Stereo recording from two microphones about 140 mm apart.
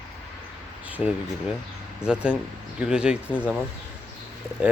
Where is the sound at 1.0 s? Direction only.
10° right (ahead or behind).